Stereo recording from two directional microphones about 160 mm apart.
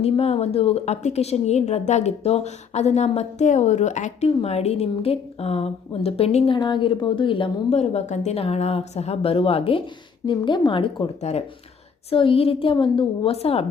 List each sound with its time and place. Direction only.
0.0 s a woman's voice: 40° left (ahead or behind)